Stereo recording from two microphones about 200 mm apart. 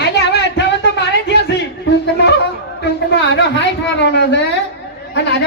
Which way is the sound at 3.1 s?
60° left (ahead or behind).